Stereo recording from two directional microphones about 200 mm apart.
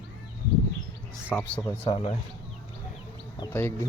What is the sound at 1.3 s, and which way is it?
Speech, 5° left (ahead or behind).